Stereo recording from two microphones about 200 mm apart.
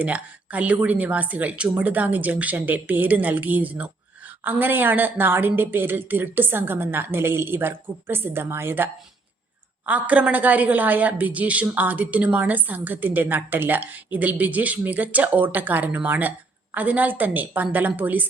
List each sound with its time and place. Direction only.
0.0 s a woman's voice: 5° right (ahead or behind)